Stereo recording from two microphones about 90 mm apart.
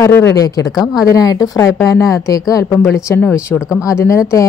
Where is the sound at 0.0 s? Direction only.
30° left (ahead or behind).